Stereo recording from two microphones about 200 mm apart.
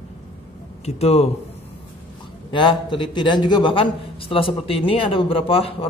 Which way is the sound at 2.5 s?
25° left (ahead or behind).